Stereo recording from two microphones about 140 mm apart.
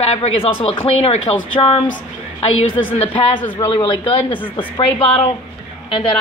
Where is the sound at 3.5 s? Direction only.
30° left (ahead or behind).